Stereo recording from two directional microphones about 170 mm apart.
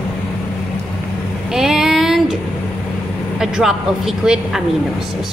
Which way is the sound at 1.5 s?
5° right (ahead or behind).